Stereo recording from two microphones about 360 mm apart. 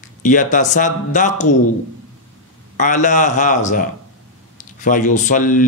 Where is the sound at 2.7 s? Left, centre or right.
Left.